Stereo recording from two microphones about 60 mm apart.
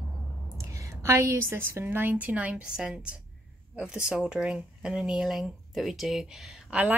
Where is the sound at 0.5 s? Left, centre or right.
Right.